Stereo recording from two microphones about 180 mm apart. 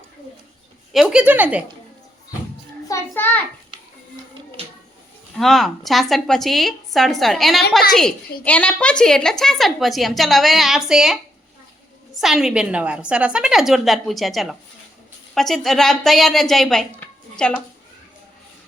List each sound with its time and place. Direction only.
0.9 s speech: 5° right (ahead or behind)
2.9 s a child's voice: 10° left (ahead or behind)
4.6 s a sound: 35° right (ahead or behind)
5.4 s a woman's voice: centre (ahead or behind)